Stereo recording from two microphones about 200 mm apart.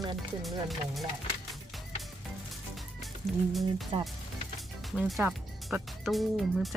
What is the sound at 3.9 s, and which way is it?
Speech, 30° right (ahead or behind).